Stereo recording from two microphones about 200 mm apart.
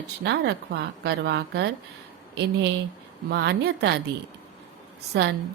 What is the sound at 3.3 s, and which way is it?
Speech, 55° right (ahead or behind).